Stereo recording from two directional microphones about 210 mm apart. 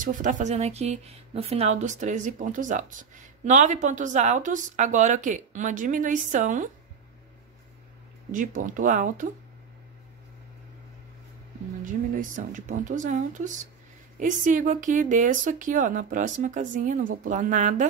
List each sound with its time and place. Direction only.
0.0 s speech: 40° right (ahead or behind)
8.3 s speech: 40° right (ahead or behind)
11.8 s speech: 40° right (ahead or behind)